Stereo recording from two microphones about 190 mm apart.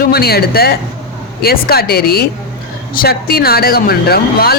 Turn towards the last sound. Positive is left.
turn(degrees=55)  # may be behind; listen again after turning